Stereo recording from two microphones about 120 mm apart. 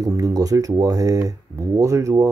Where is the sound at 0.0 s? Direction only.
30° right (ahead or behind).